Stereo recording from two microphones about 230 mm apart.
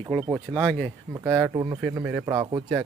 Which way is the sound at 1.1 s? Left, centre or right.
Centre.